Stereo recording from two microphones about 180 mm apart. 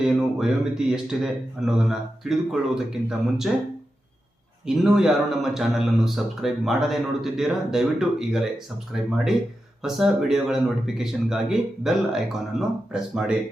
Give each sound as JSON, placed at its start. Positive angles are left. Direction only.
{"t": 0.1, "sound": "speech", "side_deg": 0}
{"t": 4.6, "sound": "speech", "side_deg": -5}